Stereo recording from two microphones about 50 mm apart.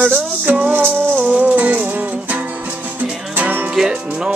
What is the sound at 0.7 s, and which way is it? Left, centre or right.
Music, right.